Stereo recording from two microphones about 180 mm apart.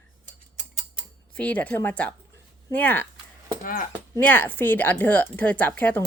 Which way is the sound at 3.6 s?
50° left (ahead or behind).